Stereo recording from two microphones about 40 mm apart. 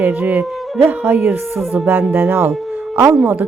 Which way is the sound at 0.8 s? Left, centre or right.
Right.